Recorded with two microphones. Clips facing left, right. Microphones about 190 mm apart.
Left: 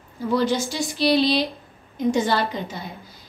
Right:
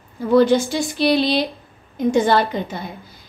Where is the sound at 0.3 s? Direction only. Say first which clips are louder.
Right 8 dB; 55° right (ahead or behind).